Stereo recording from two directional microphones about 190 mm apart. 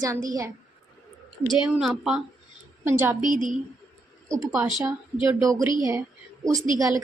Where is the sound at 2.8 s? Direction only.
10° right (ahead or behind).